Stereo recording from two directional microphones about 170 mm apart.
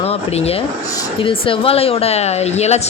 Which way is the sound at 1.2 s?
30° left (ahead or behind).